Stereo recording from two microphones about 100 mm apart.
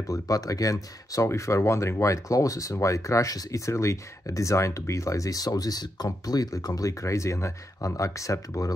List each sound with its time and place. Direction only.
0.1 s speech: 35° left (ahead or behind)